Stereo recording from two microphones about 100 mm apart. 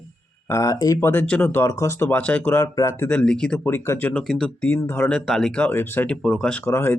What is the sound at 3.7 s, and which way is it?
Speech, 25° left (ahead or behind).